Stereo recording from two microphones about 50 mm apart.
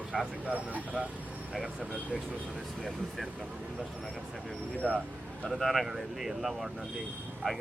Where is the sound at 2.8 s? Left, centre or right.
Centre.